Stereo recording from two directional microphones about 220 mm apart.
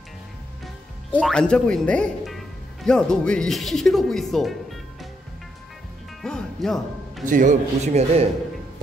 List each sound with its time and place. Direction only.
1.1 s speech: 5° left (ahead or behind)
6.2 s music: centre (ahead or behind)
7.2 s a man's voice: 35° right (ahead or behind)